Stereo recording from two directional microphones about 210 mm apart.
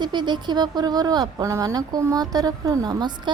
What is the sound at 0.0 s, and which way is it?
Speech, 20° right (ahead or behind).